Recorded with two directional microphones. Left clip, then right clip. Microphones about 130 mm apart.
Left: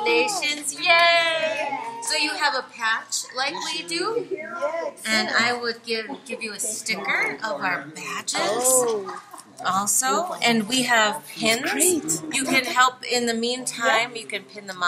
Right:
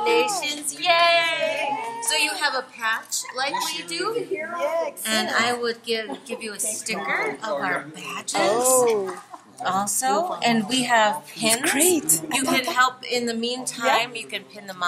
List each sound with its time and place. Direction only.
0.0 s child singing: centre (ahead or behind)
3.6 s a woman's voice: 5° right (ahead or behind)
4.6 s speech: 20° right (ahead or behind); by 8.5 s centre (ahead or behind)
8.5 s speech: 30° right (ahead or behind)
9.6 s a woman's voice: centre (ahead or behind)
11.6 s a woman's voice: 35° right (ahead or behind)
12.3 s a woman's voice: centre (ahead or behind)